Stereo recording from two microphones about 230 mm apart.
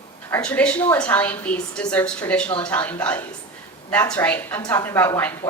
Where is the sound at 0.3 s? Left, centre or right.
Centre.